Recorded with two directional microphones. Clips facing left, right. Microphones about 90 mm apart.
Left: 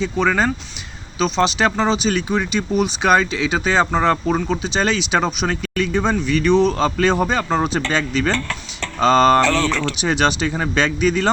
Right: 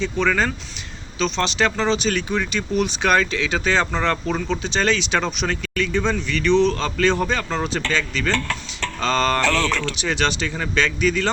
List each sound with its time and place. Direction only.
0.3 s speech: 15° left (ahead or behind)